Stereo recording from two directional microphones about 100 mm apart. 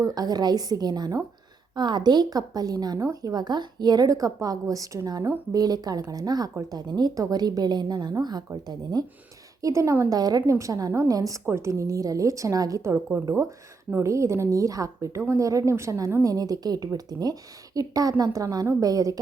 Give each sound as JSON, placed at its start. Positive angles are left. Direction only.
{"t": 0.0, "sound": "a woman's voice", "side_deg": -40}
{"t": 10.2, "sound": "speech", "side_deg": -40}